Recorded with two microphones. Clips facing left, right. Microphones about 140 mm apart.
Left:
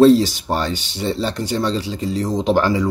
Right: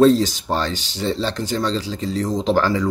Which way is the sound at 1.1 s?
5° left (ahead or behind).